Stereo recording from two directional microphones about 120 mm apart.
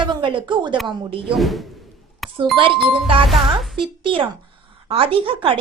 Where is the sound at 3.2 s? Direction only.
Centre (ahead or behind).